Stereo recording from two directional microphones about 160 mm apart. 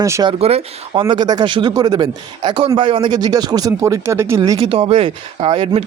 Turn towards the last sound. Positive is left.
turn(degrees=-35)  # may be behind; listen again after turning